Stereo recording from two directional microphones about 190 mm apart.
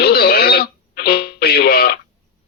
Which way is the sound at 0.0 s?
55° left (ahead or behind).